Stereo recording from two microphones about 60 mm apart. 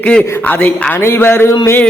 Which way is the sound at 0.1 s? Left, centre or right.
Left.